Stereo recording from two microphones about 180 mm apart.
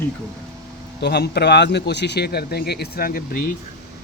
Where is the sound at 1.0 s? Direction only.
65° left (ahead or behind).